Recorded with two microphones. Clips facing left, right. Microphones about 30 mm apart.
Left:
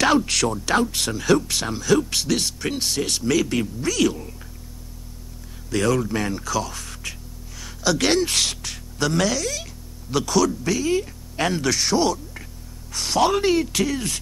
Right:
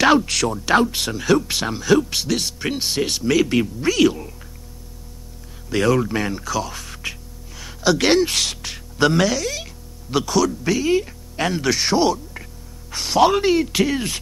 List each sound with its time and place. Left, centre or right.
0.2 s speech: centre
2.6 s speech: centre
5.7 s speech: centre
7.0 s music: centre
9.2 s speech: centre
10.6 s speech: centre
11.3 s speech: centre
11.7 s speech: centre
13.7 s speech: right